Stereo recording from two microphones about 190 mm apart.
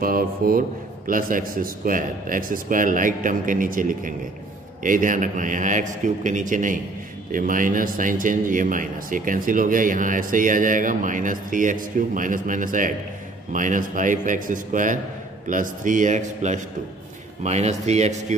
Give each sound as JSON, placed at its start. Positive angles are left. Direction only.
{"t": 0.0, "sound": "a man's voice", "side_deg": -50}